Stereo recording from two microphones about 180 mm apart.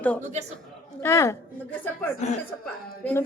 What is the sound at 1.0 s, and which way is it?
Speech, 15° left (ahead or behind).